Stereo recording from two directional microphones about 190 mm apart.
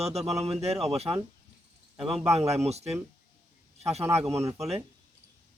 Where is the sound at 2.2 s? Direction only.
35° right (ahead or behind).